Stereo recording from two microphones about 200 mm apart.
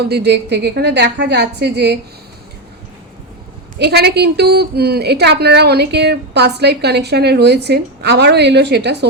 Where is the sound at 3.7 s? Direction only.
55° right (ahead or behind).